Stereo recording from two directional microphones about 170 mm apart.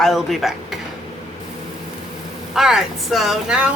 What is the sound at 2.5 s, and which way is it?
Speech, centre (ahead or behind).